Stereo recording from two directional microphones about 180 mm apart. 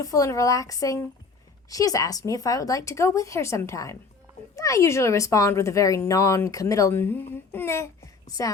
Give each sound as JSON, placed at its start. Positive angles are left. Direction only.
{"t": 0.0, "sound": "a child's voice", "side_deg": 20}